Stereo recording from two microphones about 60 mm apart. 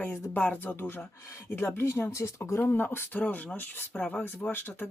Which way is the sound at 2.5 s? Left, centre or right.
Left.